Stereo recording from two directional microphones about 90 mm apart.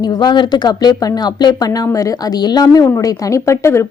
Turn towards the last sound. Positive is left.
turn(degrees=35)  # may be behind; listen again after turning